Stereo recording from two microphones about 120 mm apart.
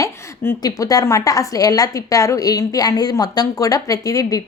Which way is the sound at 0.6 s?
30° left (ahead or behind).